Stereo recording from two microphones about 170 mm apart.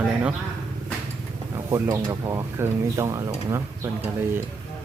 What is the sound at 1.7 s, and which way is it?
Speech, 15° right (ahead or behind).